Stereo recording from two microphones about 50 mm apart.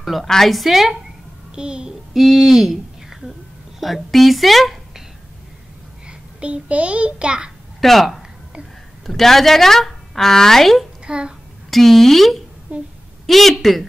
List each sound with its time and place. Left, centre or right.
0.0 s a woman's voice: centre
1.5 s a child's voice: centre
2.1 s a woman's voice: centre
6.0 s a child's voice: right
7.8 s a woman's voice: centre
11.1 s a child's voice: centre
11.7 s a woman's voice: centre
12.7 s speech: right
13.3 s a woman's voice: centre